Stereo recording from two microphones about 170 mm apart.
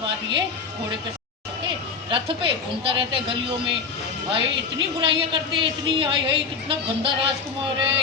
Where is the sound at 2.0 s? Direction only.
30° right (ahead or behind).